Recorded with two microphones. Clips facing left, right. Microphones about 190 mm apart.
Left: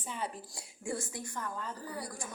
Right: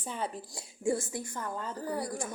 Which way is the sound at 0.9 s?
25° right (ahead or behind).